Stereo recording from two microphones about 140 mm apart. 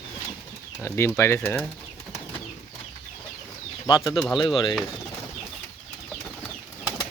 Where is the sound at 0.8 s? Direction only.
20° left (ahead or behind).